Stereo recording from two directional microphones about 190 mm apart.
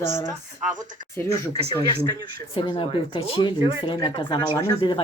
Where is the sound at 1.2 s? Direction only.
15° left (ahead or behind).